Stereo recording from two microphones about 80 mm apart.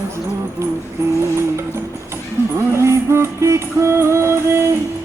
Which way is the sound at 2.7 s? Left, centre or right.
Right.